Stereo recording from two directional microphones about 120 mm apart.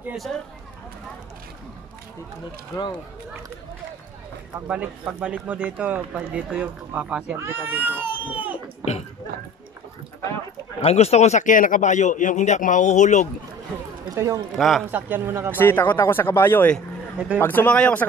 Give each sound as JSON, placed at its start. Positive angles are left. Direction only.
{"t": 4.6, "sound": "speech", "side_deg": -10}
{"t": 10.8, "sound": "speech", "side_deg": 60}
{"t": 14.1, "sound": "speech", "side_deg": -25}
{"t": 14.5, "sound": "speech", "side_deg": 0}
{"t": 14.9, "sound": "speech", "side_deg": -15}
{"t": 15.5, "sound": "speech", "side_deg": 20}